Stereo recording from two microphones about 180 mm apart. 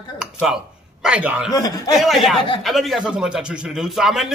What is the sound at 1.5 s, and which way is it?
Speech, 20° left (ahead or behind).